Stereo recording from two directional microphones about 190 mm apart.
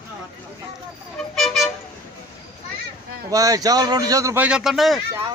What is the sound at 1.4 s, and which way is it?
Toot, centre (ahead or behind).